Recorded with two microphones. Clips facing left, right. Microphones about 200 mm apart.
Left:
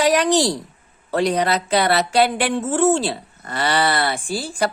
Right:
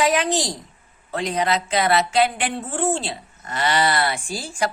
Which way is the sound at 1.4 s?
40° left (ahead or behind).